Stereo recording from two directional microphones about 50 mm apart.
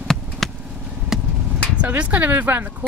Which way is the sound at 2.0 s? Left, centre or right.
Right.